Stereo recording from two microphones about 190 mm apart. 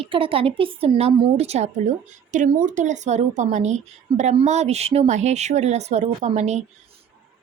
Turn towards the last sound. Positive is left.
turn(degrees=-35)  # may be behind; listen again after turning